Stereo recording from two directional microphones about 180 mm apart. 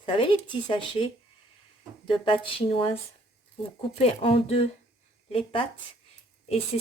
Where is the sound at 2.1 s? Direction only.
30° left (ahead or behind).